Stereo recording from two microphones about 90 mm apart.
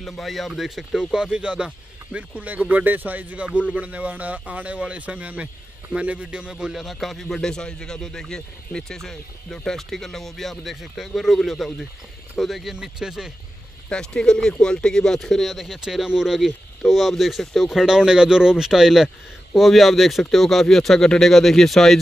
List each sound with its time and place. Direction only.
0.0 s speech: centre (ahead or behind)
13.8 s speech: 10° left (ahead or behind)